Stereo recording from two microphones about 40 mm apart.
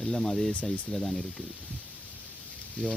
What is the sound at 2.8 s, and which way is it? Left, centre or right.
Speech, left.